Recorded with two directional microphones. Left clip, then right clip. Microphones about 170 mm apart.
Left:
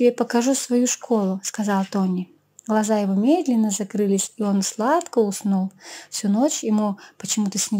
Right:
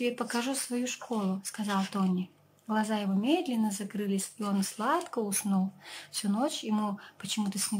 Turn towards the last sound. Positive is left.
turn(degrees=30)  # may be behind; listen again after turning